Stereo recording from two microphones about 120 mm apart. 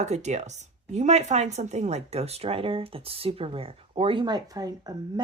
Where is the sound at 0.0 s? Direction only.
75° right (ahead or behind).